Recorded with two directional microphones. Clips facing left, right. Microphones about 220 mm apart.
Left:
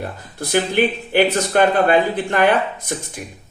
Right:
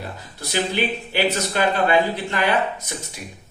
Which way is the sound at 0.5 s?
55° left (ahead or behind).